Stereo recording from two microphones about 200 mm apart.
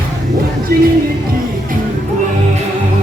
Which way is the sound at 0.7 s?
50° right (ahead or behind).